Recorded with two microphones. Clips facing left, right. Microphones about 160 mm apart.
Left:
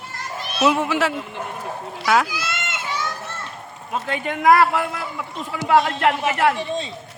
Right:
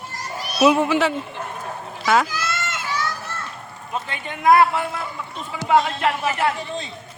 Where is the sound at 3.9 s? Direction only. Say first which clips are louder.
Left 4 dB; 80° left.